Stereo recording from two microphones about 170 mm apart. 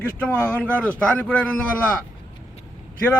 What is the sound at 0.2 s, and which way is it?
A man's voice, 10° left (ahead or behind).